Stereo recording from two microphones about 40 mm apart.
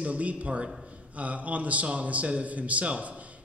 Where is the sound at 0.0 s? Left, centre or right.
Right.